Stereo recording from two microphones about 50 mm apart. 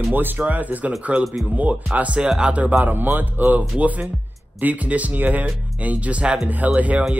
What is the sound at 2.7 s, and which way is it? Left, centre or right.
Speech, right.